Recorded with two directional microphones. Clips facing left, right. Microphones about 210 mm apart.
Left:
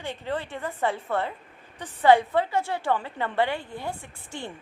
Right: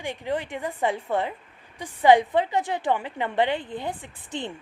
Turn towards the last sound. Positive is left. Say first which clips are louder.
# right 4 dB
turn(degrees=-20)  # may be behind; listen again after turning